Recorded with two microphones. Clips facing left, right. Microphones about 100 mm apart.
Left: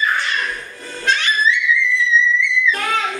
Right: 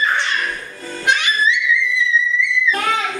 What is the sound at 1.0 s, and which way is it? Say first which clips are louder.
Music: even; 15° right (ahead or behind).